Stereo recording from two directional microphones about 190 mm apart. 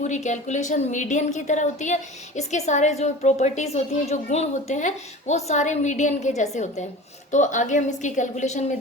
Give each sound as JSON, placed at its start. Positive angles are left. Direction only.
{"t": 0.0, "sound": "a woman's voice", "side_deg": 40}